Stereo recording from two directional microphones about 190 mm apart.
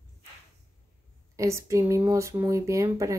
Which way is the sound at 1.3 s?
15° right (ahead or behind).